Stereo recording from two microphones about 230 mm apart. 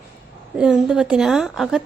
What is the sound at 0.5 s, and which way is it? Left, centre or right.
A woman's voice, centre.